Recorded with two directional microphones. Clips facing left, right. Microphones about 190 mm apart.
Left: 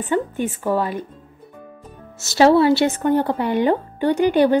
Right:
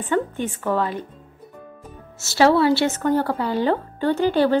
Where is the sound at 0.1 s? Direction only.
10° left (ahead or behind).